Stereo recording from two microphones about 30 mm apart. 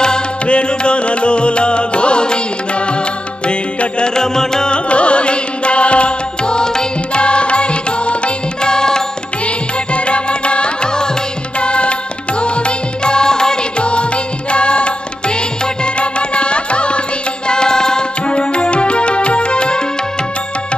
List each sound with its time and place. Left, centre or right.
0.5 s music: left
4.1 s music: left
4.6 s music: left
7.2 s music: left
8.6 s music: left
9.9 s music: left
13.7 s music: left
17.5 s music: left
18.2 s music: left